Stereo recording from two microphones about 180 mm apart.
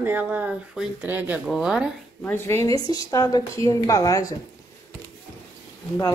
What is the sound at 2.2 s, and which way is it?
A woman's voice, 15° left (ahead or behind).